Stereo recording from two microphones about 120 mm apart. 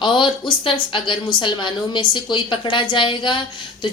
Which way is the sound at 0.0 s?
45° left (ahead or behind).